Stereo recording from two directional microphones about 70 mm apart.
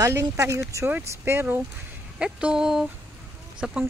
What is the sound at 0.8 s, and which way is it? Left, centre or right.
Speech, right.